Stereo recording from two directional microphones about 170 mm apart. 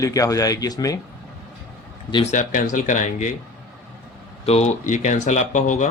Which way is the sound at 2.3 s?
50° left (ahead or behind).